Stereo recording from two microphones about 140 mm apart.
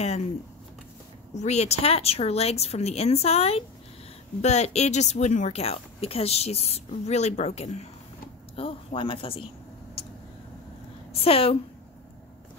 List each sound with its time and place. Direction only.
0.0 s speech: 50° left (ahead or behind)
1.3 s speech: 55° left (ahead or behind)
8.5 s speech: 40° left (ahead or behind)
11.2 s speech: 45° left (ahead or behind)